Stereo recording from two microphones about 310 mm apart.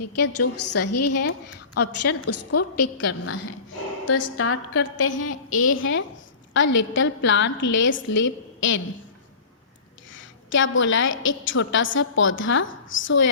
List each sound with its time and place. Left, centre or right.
0.0 s a woman's voice: left
4.4 s a woman's voice: left
10.1 s a woman's voice: left